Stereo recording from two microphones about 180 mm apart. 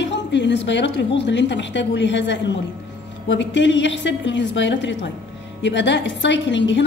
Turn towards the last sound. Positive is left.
turn(degrees=80)